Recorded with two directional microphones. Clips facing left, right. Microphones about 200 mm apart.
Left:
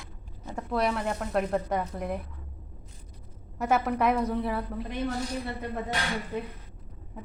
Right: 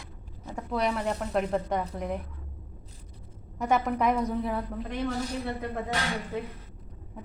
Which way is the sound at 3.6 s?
5° left (ahead or behind).